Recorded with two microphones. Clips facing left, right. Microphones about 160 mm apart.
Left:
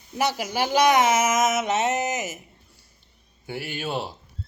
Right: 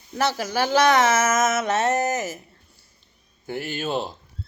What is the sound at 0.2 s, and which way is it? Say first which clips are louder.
Speech: right 1 dB; 15° left (ahead or behind).